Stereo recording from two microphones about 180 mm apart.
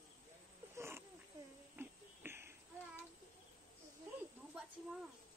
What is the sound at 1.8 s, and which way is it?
Music, 15° right (ahead or behind).